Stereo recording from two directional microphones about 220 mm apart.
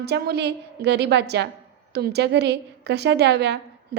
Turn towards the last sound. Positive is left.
turn(degrees=-50)  # may be behind; listen again after turning